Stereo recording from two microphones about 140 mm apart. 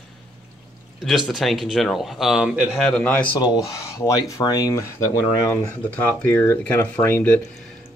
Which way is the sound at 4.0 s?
25° left (ahead or behind).